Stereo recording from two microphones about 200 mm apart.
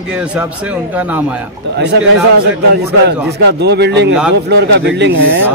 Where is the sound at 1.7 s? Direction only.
60° right (ahead or behind).